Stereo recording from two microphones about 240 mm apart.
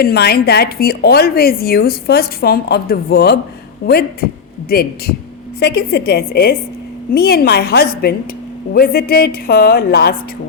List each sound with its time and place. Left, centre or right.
0.0 s speech: left